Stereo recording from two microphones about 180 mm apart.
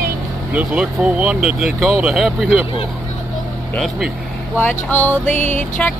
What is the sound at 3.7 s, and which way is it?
Speech, centre (ahead or behind).